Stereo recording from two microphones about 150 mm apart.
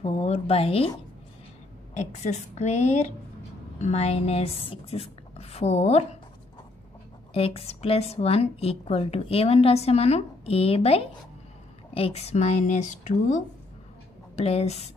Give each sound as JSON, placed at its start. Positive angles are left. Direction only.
{"t": 0.0, "sound": "a woman's voice", "side_deg": 40}
{"t": 2.0, "sound": "a woman's voice", "side_deg": 50}
{"t": 7.3, "sound": "a woman's voice", "side_deg": 40}